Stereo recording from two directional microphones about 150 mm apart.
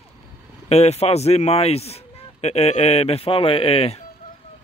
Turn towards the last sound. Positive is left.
turn(degrees=40)  # may be behind; listen again after turning